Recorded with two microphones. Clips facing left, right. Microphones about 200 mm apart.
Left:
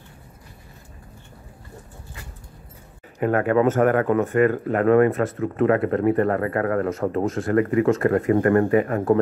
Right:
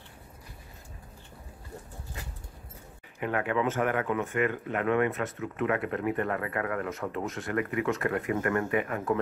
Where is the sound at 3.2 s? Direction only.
45° left (ahead or behind).